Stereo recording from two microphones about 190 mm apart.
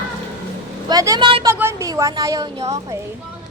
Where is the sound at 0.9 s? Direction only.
20° right (ahead or behind).